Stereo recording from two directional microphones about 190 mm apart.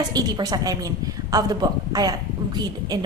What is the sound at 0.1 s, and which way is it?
A woman's voice, 20° right (ahead or behind).